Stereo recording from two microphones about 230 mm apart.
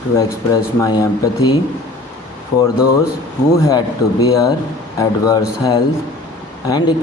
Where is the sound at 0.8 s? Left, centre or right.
Centre.